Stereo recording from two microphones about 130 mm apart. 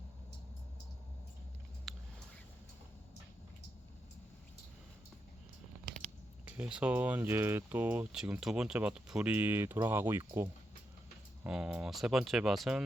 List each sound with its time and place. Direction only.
1.9 s a sound: centre (ahead or behind)
6.6 s speech: 10° right (ahead or behind)
11.4 s speech: 5° right (ahead or behind)